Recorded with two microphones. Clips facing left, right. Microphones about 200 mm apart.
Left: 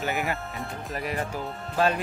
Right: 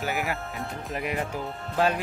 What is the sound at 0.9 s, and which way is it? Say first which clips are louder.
Speech: right 1 dB; 15° right (ahead or behind).